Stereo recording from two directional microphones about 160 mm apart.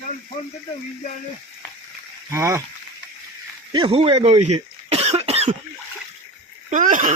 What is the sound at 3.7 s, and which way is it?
Cough, 35° right (ahead or behind).